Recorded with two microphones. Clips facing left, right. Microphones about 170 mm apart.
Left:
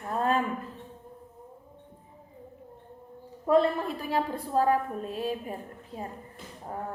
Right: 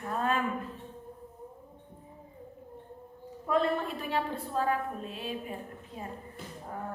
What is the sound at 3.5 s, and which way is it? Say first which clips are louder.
A woman's voice: left 5 dB; 35° left (ahead or behind).